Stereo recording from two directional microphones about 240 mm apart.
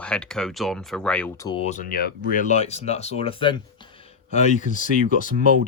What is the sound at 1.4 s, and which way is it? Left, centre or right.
Speech, left.